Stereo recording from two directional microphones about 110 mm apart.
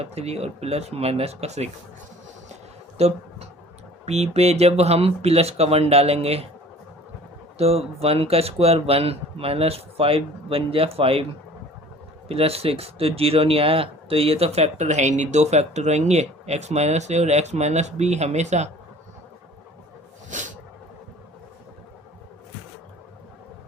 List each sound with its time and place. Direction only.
0.0 s speech: 75° right (ahead or behind); by 1.7 s 90° right
3.0 s speech: 80° right
7.6 s speech: 70° right (ahead or behind)
12.3 s speech: 65° right (ahead or behind); by 18.7 s 90° right